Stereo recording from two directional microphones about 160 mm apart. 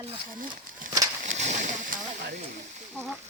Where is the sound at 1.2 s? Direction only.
50° right (ahead or behind).